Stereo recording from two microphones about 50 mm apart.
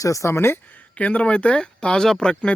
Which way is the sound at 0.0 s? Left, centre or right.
Left.